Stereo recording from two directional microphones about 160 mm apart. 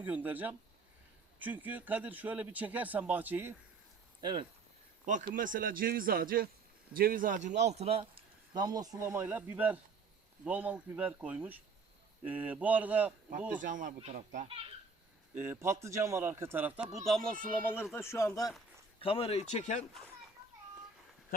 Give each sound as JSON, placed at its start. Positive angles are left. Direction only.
{"t": 0.0, "sound": "speech", "side_deg": -10}
{"t": 4.2, "sound": "speech", "side_deg": -30}
{"t": 5.0, "sound": "a man's voice", "side_deg": -55}
{"t": 8.5, "sound": "speech", "side_deg": -25}
{"t": 13.5, "sound": "a man's voice", "side_deg": -55}
{"t": 15.4, "sound": "speech", "side_deg": -15}
{"t": 19.0, "sound": "speech", "side_deg": 35}